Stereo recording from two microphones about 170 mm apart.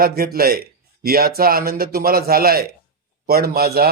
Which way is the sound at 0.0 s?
60° right (ahead or behind).